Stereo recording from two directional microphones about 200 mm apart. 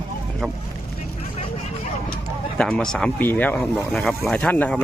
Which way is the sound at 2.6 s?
5° left (ahead or behind).